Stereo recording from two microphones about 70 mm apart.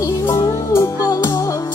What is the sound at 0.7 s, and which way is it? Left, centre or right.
Music, left.